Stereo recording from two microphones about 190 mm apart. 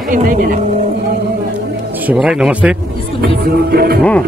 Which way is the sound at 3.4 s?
55° right (ahead or behind).